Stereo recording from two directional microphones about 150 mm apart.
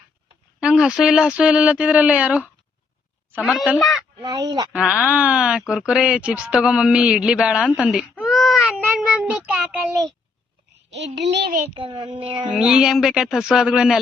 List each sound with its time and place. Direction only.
0.6 s speech: 5° right (ahead or behind)
4.2 s speech: 25° right (ahead or behind)
4.7 s speech: 5° right (ahead or behind)
8.2 s child singing: centre (ahead or behind)
11.3 s a child's voice: 90° right
11.7 s a child's voice: 35° right (ahead or behind)
12.5 s speech: 5° right (ahead or behind)